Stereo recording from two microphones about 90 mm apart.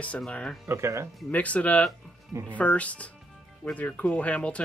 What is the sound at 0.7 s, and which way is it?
Speech, 30° right (ahead or behind).